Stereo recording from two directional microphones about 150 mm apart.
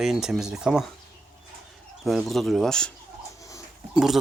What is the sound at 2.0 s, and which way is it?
Speech, centre (ahead or behind).